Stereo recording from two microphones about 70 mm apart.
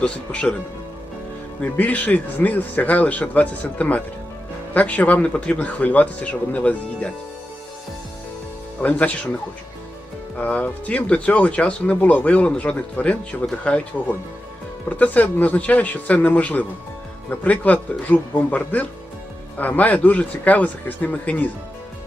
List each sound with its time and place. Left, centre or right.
0.0 s speech: centre
1.6 s speech: left
8.8 s speech: left
10.3 s speech: left